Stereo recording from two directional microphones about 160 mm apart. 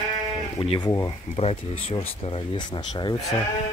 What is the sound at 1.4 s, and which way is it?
Speech, 40° left (ahead or behind).